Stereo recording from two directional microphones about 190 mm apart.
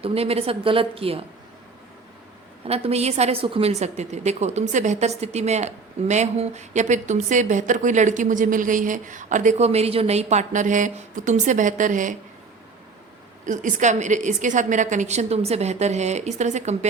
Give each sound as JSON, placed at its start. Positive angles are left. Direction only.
{"t": 0.0, "sound": "a woman's voice", "side_deg": -30}
{"t": 2.6, "sound": "a woman's voice", "side_deg": -30}
{"t": 13.4, "sound": "a woman's voice", "side_deg": -40}